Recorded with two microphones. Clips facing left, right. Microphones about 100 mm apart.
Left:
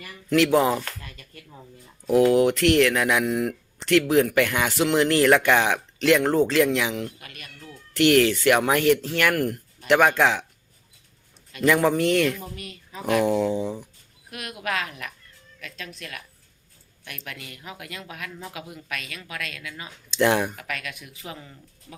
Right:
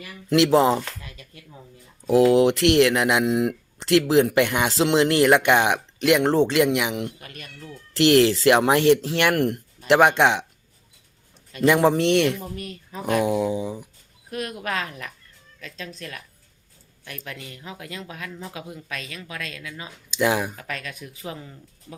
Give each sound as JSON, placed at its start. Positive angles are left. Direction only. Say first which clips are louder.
{"t": 0.0, "sound": "speech", "louder": "right 1 dB", "side_deg": -20}
{"t": 0.9, "sound": "speech", "louder": "even", "side_deg": -10}
{"t": 1.2, "sound": "a sound", "louder": "right 1 dB", "side_deg": -5}
{"t": 2.0, "sound": "speech", "louder": "right 2 dB", "side_deg": -25}
{"t": 6.2, "sound": "speech", "louder": "right 2 dB", "side_deg": -30}
{"t": 6.5, "sound": "a sound", "louder": "right 1 dB", "side_deg": -15}
{"t": 7.2, "sound": "speech", "louder": "right 3 dB", "side_deg": -30}
{"t": 11.5, "sound": "speech", "louder": "right 2 dB", "side_deg": -25}
{"t": 12.5, "sound": "speech", "louder": "right 5 dB", "side_deg": -40}
{"t": 13.1, "sound": "a sound", "louder": "left 1 dB", "side_deg": -10}
{"t": 14.3, "sound": "speech", "louder": "right 2 dB", "side_deg": -35}
{"t": 20.1, "sound": "speech", "louder": "left 1 dB", "side_deg": -5}
{"t": 20.6, "sound": "speech", "louder": "right 1 dB", "side_deg": -30}